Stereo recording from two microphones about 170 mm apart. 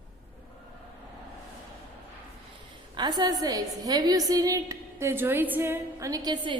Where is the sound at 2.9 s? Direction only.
25° right (ahead or behind).